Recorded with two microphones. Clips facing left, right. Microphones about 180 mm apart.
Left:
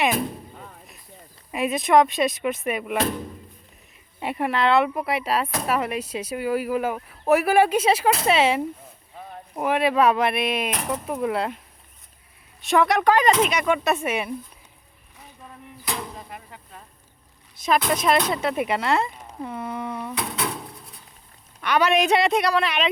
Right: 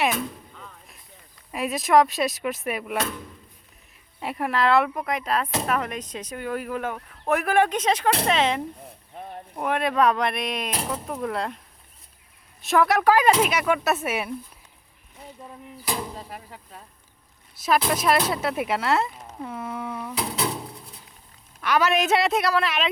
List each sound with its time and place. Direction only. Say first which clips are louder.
0.1 s a sound: left 3 dB; 35° left (ahead or behind)
1.5 s speech: left 2 dB; centre (ahead or behind)
3.0 s speech: left 5 dB; 35° left (ahead or behind)
4.2 s speech: left 1 dB; centre (ahead or behind)
12.6 s speech: even; centre (ahead or behind)
15.8 s a sound: right 1 dB; 5° right (ahead or behind)
17.6 s speech: left 1 dB; 5° right (ahead or behind)
20.1 s a sound: right 4 dB; 25° right (ahead or behind)
21.6 s speech: left 2 dB; centre (ahead or behind)